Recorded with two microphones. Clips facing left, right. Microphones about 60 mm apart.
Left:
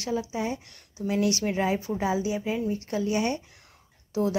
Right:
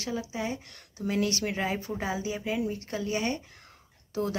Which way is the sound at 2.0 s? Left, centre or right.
Right.